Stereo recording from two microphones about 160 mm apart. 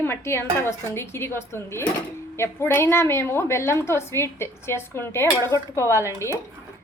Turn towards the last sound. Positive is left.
turn(degrees=20)  # may be behind; listen again after turning